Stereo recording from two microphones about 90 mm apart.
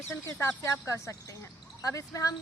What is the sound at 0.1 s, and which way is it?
A woman's voice, 35° left (ahead or behind).